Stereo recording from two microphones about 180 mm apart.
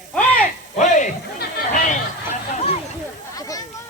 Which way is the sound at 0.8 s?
45° left (ahead or behind).